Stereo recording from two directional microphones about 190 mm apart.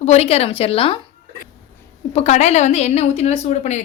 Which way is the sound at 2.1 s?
35° left (ahead or behind).